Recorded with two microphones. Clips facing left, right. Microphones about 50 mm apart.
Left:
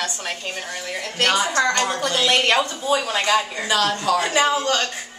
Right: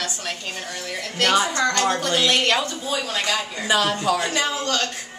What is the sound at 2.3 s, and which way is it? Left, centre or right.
A woman's voice, centre.